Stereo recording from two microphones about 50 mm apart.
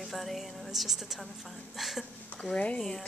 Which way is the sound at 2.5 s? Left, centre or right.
Left.